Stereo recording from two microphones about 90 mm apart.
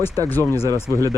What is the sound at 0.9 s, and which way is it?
Speech, 40° right (ahead or behind).